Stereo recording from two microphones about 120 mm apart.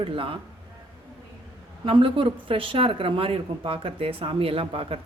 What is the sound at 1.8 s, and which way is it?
Speech, 45° right (ahead or behind).